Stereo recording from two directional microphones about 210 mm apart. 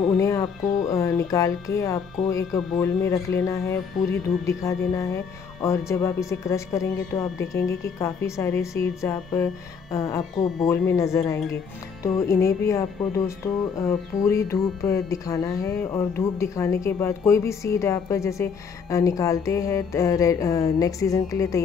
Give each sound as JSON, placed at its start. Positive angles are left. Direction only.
{"t": 0.2, "sound": "speech", "side_deg": 15}